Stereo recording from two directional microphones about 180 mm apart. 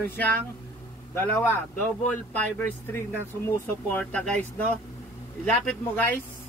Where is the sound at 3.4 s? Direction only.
10° left (ahead or behind).